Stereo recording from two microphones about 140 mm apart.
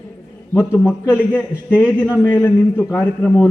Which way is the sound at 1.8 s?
10° right (ahead or behind).